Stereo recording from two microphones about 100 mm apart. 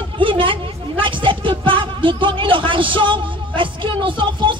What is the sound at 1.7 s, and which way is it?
A woman's voice, 55° right (ahead or behind).